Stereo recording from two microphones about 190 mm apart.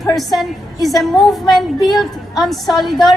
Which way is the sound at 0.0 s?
Centre (ahead or behind).